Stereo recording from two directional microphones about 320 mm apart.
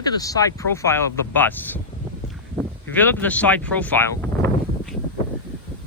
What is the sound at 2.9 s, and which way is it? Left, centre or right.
Speech, centre.